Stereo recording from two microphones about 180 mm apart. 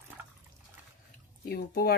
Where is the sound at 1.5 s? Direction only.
55° left (ahead or behind).